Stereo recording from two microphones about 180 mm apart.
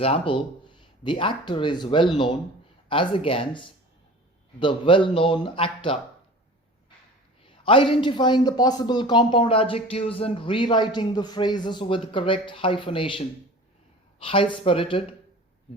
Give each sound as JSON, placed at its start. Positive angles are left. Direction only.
{"t": 0.0, "sound": "a man's voice", "side_deg": 30}
{"t": 7.4, "sound": "a man's voice", "side_deg": 30}